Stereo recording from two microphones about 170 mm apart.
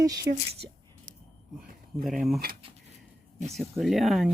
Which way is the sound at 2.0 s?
Centre (ahead or behind).